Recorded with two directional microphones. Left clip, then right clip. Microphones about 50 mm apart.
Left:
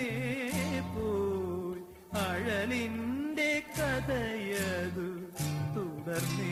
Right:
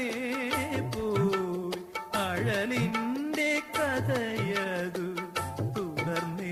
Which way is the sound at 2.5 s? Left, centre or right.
Left.